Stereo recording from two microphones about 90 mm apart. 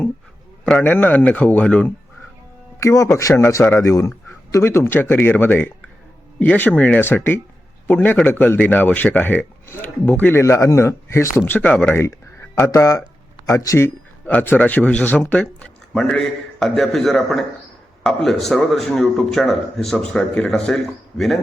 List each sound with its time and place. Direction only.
0.6 s a man's voice: 15° left (ahead or behind)
2.8 s speech: 35° left (ahead or behind); by 10.4 s 20° left (ahead or behind)
10.4 s speech: 35° left (ahead or behind); by 12.0 s 15° left (ahead or behind)
12.0 s a sound: 30° left (ahead or behind)
13.4 s a man's voice: 35° left (ahead or behind); by 21.3 s 5° left (ahead or behind)